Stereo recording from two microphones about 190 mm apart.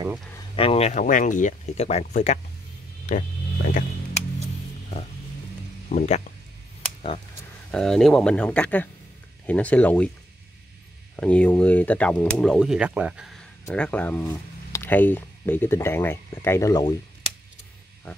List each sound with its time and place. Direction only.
0.6 s speech: 30° left (ahead or behind)
5.9 s speech: 35° left (ahead or behind)
7.7 s speech: centre (ahead or behind)
11.1 s speech: 5° left (ahead or behind)